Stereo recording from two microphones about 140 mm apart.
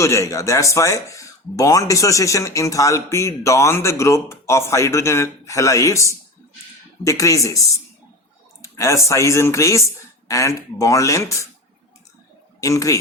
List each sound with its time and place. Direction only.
0.0 s speech: 20° left (ahead or behind)
8.6 s speech: 20° left (ahead or behind)
12.5 s speech: 25° left (ahead or behind)